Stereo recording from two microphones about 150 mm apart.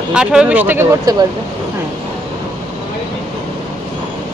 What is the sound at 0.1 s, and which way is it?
Speech, 5° right (ahead or behind).